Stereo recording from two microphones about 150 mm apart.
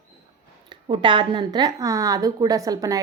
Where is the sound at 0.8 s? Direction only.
35° right (ahead or behind).